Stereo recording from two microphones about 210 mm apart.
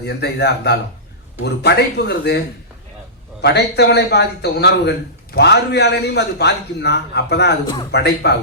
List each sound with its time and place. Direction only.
0.0 s a man's voice: 50° left (ahead or behind)
3.4 s a man's voice: 50° left (ahead or behind)